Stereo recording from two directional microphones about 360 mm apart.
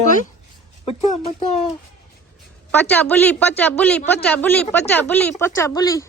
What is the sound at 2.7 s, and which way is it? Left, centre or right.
A man's voice, centre.